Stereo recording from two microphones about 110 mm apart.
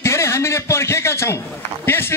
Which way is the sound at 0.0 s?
25° left (ahead or behind).